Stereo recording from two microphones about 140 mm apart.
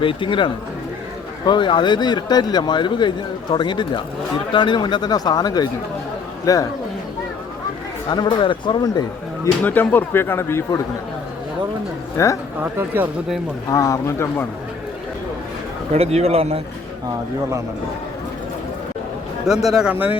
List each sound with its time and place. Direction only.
0.0 s a man's voice: 35° left (ahead or behind)
8.1 s speech: 35° left (ahead or behind)
9.6 s speech: 10° left (ahead or behind)
12.1 s speech: 20° left (ahead or behind)
12.7 s speech: 15° right (ahead or behind)
13.7 s speech: 25° left (ahead or behind)
15.9 s a man's voice: 50° right (ahead or behind)
19.5 s a man's voice: 5° right (ahead or behind)